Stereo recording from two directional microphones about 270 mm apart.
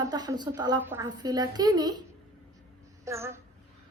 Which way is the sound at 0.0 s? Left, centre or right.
Centre.